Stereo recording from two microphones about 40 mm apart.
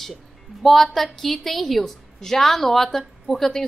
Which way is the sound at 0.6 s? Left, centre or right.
Centre.